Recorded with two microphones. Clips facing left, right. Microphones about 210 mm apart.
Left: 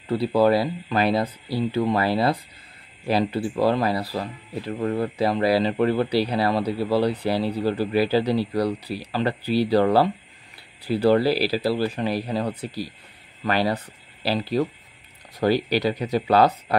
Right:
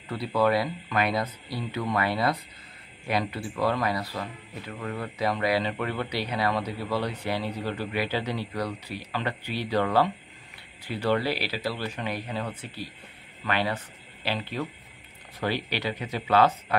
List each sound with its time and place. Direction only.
0.1 s speech: 30° left (ahead or behind)